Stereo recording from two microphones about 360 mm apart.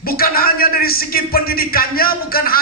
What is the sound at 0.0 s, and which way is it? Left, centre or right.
Speech, left.